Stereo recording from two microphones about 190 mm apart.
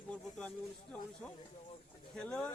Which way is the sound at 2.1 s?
5° left (ahead or behind).